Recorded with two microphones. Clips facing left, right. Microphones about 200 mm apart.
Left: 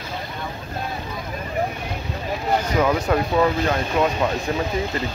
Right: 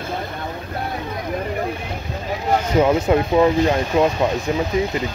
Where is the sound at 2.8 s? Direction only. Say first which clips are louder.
Right 5 dB; 20° right (ahead or behind).